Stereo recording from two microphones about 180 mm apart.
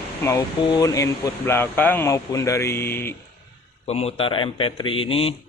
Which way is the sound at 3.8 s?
35° left (ahead or behind).